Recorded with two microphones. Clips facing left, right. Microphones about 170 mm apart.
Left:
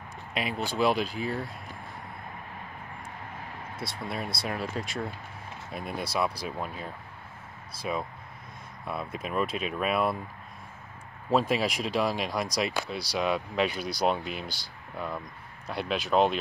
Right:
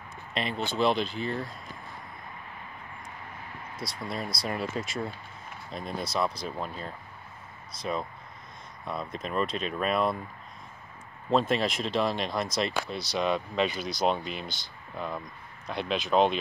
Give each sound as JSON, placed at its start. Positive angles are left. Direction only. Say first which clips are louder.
{"t": 0.3, "sound": "speech", "louder": "even", "side_deg": 5}
{"t": 3.7, "sound": "speech", "louder": "even", "side_deg": 25}
{"t": 4.5, "sound": "speech", "louder": "right 2 dB", "side_deg": 0}
{"t": 11.2, "sound": "speech", "louder": "even", "side_deg": 5}